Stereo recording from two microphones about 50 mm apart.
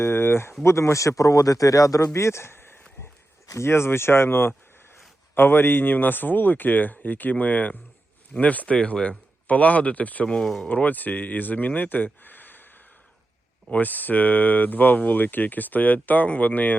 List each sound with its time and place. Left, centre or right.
0.0 s speech: left
0.6 s speech: left
2.1 s speech: left
3.4 s speech: left
10.4 s speech: centre
10.7 s speech: left